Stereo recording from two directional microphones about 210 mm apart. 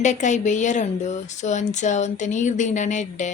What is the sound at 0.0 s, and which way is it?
Speech, 35° left (ahead or behind).